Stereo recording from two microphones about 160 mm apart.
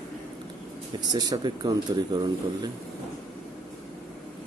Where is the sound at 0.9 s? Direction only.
25° right (ahead or behind).